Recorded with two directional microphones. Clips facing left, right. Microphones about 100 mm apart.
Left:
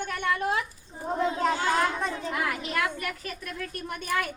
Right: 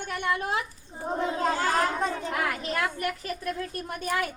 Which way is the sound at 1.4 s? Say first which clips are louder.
Right 1 dB; 40° right (ahead or behind).